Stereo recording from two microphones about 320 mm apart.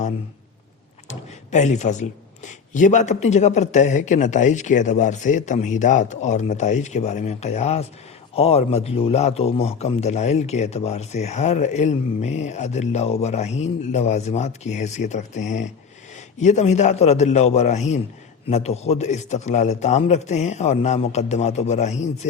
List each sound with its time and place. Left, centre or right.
1.0 s a man's voice: left